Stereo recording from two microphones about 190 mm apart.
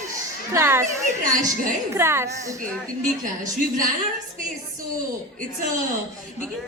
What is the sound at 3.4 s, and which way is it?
Speech, 45° right (ahead or behind).